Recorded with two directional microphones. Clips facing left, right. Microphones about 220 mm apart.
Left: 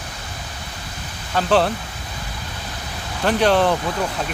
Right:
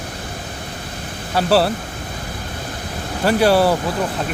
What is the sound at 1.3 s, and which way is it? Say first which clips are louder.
Speech: right 2 dB; 5° right (ahead or behind).